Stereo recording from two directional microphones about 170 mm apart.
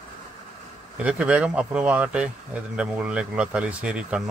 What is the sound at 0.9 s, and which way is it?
Speech, 5° right (ahead or behind).